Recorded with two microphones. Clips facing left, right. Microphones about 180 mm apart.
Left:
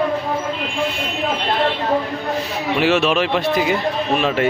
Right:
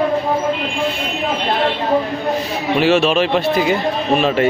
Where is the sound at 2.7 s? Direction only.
30° right (ahead or behind).